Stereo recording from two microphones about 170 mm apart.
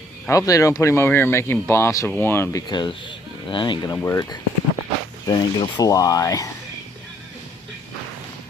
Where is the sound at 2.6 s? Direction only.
25° left (ahead or behind).